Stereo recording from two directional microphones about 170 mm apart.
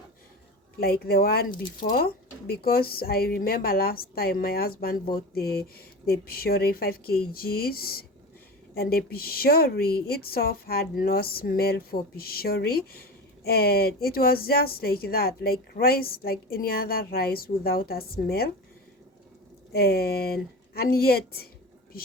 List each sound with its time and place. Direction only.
0.8 s speech: 65° left (ahead or behind)
19.7 s speech: 65° left (ahead or behind)